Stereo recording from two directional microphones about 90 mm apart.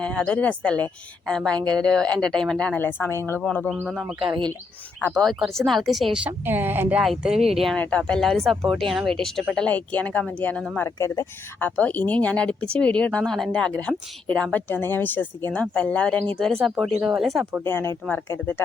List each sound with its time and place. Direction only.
0.0 s speech: 10° left (ahead or behind)
2.7 s speech: 25° left (ahead or behind)
3.4 s speech: 20° left (ahead or behind)
4.3 s speech: 50° right (ahead or behind)
5.2 s speech: 5° left (ahead or behind)
6.2 s speech: 20° right (ahead or behind)
7.0 s speech: 5° right (ahead or behind)
7.8 s speech: 15° left (ahead or behind)
9.6 s speech: 15° left (ahead or behind)
10.9 s speech: 35° left (ahead or behind)
11.6 s speech: 20° left (ahead or behind)
16.6 s speech: 5° right (ahead or behind)
17.6 s speech: 25° left (ahead or behind)